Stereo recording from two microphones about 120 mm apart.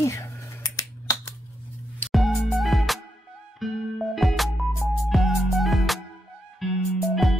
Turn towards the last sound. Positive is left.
turn(degrees=0)  # may be behind; listen again after turning